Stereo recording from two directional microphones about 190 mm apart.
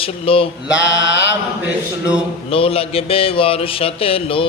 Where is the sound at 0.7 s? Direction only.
70° left (ahead or behind).